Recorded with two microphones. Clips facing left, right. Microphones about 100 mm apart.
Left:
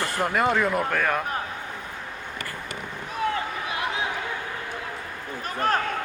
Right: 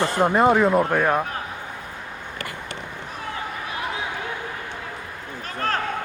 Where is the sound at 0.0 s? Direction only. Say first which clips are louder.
Right 6 dB; 20° right (ahead or behind).